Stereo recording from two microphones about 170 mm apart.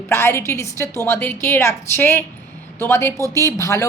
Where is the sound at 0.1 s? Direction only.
15° left (ahead or behind).